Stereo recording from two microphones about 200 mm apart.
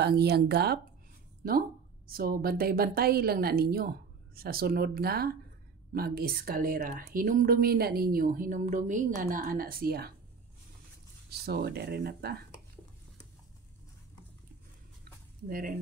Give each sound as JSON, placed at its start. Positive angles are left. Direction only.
{"t": 0.0, "sound": "speech", "side_deg": -55}
{"t": 11.2, "sound": "speech", "side_deg": -50}
{"t": 15.4, "sound": "speech", "side_deg": -45}